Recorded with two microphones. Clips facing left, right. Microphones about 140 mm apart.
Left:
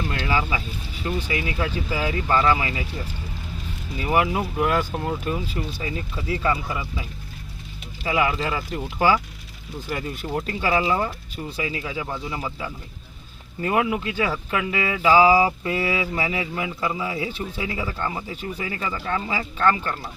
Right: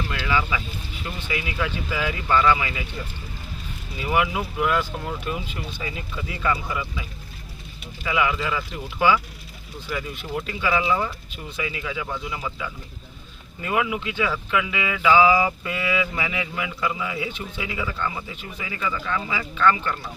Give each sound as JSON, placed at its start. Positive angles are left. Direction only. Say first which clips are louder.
{"t": 0.3, "sound": "speech", "louder": "right 1 dB", "side_deg": 35}
{"t": 4.1, "sound": "speech", "louder": "left 2 dB", "side_deg": 35}
{"t": 8.0, "sound": "speech", "louder": "left 1 dB", "side_deg": 35}
{"t": 13.6, "sound": "speech", "louder": "left 2 dB", "side_deg": 40}